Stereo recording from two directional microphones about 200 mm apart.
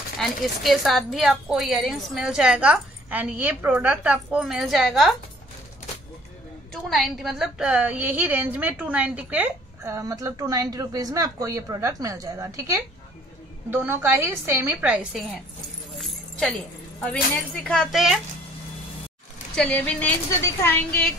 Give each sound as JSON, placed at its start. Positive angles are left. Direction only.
{"t": 0.2, "sound": "a woman's voice", "side_deg": 0}
{"t": 6.7, "sound": "a woman's voice", "side_deg": 0}
{"t": 16.0, "sound": "keys jangling", "side_deg": 5}
{"t": 17.0, "sound": "a woman's voice", "side_deg": 5}
{"t": 19.5, "sound": "a woman's voice", "side_deg": 5}